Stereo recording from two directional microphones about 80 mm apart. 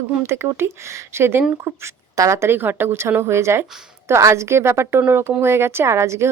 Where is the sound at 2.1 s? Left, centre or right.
Right.